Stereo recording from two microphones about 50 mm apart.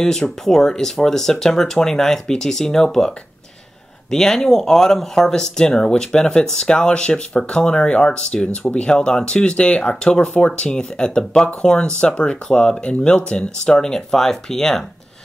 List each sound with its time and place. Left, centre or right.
0.0 s speech: centre
4.1 s speech: centre